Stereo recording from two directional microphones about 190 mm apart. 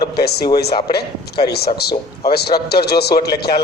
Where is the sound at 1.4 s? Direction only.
55° left (ahead or behind).